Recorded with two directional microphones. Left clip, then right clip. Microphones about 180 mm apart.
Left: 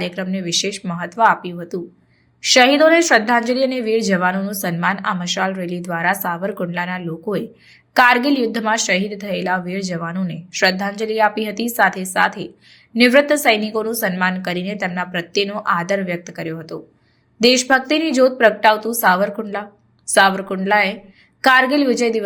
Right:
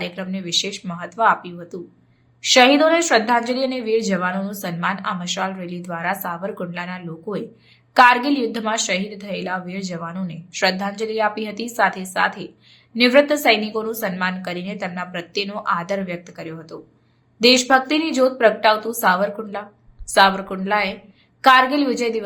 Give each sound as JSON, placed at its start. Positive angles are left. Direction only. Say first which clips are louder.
{"t": 0.0, "sound": "a woman's voice", "louder": "left 4 dB", "side_deg": 15}